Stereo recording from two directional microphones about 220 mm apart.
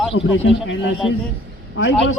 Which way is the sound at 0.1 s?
60° left (ahead or behind).